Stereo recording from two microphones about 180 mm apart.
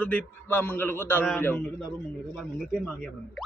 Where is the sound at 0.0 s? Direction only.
10° left (ahead or behind).